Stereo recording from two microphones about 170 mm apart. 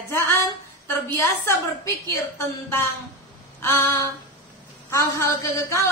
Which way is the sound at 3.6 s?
15° left (ahead or behind).